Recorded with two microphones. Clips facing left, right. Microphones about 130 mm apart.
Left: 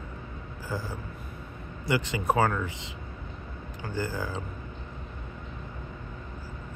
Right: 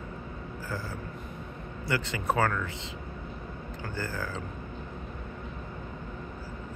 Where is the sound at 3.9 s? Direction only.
15° left (ahead or behind).